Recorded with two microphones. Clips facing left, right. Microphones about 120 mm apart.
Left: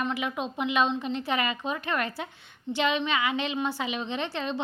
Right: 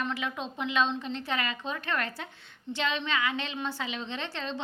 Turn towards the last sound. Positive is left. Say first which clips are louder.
# left 5 dB
turn(degrees=15)  # may be behind; listen again after turning